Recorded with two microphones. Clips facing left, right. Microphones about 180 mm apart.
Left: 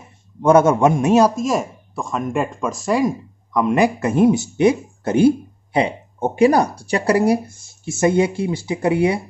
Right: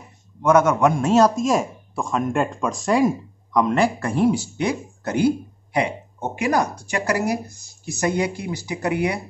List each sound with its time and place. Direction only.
0.4 s speech: 30° left (ahead or behind)
1.3 s speech: centre (ahead or behind)
3.7 s speech: 20° left (ahead or behind)